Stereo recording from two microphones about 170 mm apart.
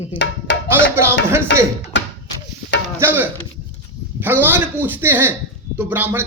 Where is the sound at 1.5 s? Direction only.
90° left.